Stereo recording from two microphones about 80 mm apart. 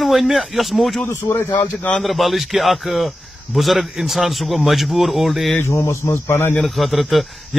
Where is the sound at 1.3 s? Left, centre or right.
Left.